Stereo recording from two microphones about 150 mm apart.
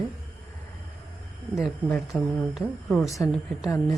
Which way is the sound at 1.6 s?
5° left (ahead or behind).